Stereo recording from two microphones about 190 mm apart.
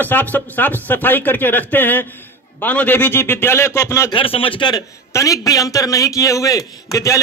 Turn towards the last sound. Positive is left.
turn(degrees=15)  # may be behind; listen again after turning